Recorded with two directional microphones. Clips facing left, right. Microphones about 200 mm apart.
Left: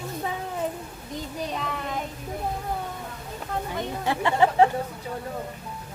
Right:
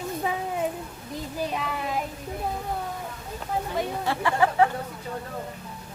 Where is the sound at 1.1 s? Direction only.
5° right (ahead or behind).